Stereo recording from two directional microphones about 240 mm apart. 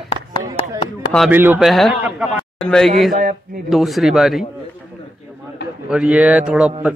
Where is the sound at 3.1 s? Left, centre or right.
Right.